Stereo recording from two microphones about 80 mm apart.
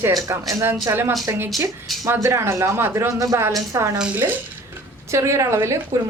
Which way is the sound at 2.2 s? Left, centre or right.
Right.